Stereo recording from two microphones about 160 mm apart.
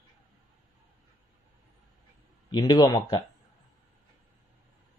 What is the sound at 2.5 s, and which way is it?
Speech, 25° left (ahead or behind).